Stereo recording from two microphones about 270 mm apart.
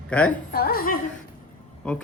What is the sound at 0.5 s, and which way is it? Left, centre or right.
Speech, left.